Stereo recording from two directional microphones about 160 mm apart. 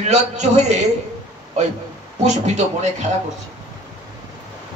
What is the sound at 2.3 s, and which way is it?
Speech, 45° right (ahead or behind).